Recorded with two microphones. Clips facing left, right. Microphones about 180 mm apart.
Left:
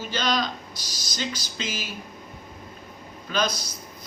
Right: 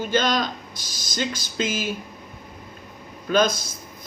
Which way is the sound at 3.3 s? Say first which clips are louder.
Right 6 dB; 50° right (ahead or behind).